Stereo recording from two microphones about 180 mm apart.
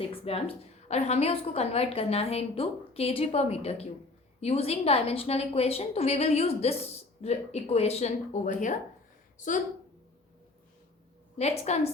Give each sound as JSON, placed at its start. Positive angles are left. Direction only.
{"t": 0.1, "sound": "a woman's voice", "side_deg": 30}
{"t": 11.3, "sound": "a woman's voice", "side_deg": 35}